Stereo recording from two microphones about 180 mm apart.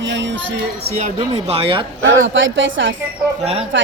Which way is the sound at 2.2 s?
90° right.